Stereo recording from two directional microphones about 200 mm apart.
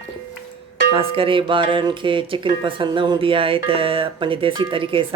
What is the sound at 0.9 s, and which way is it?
Speech, 25° right (ahead or behind).